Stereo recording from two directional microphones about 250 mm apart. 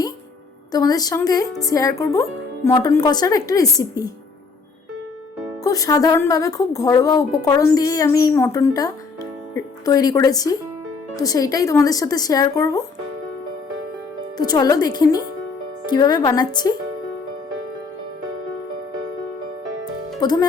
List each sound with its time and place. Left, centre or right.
0.7 s a woman's voice: centre
5.6 s a woman's voice: centre
14.3 s a woman's voice: centre